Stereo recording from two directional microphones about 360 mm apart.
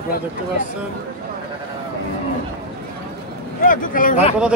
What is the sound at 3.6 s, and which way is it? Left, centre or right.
Speech, left.